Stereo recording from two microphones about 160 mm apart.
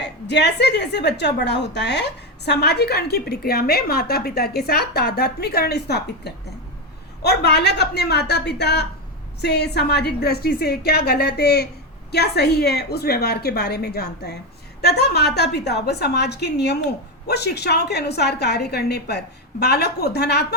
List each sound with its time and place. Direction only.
0.0 s a woman's voice: 90° left